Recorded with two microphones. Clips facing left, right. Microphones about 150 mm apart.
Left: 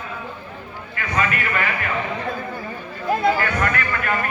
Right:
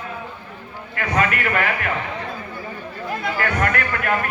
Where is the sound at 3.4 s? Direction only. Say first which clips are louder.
Right 1 dB; 60° right (ahead or behind).